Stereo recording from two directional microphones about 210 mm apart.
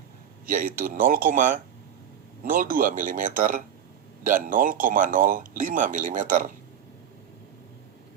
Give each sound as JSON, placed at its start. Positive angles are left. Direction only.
{"t": 0.4, "sound": "speech", "side_deg": -40}